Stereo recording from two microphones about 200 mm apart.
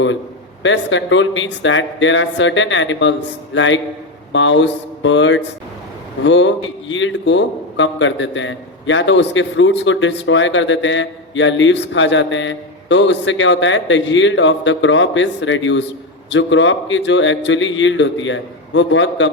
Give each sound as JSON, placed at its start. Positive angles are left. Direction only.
{"t": 0.6, "sound": "a man's voice", "side_deg": 65}